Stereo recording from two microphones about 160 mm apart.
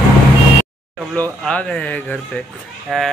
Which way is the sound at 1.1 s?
10° left (ahead or behind).